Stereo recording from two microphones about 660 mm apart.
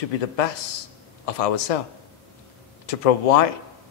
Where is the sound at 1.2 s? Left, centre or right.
Left.